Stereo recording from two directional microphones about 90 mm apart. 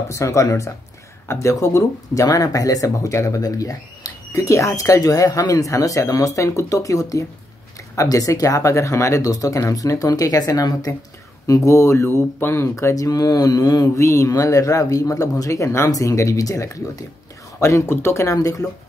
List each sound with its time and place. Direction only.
0.1 s speech: 35° left (ahead or behind)